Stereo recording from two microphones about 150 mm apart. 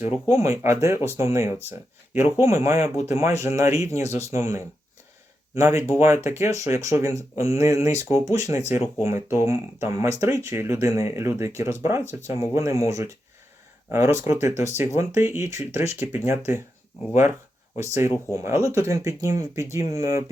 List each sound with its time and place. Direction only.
0.0 s speech: 20° right (ahead or behind)
2.7 s speech: 45° left (ahead or behind)
3.1 s speech: 20° right (ahead or behind)
17.8 s speech: 20° right (ahead or behind)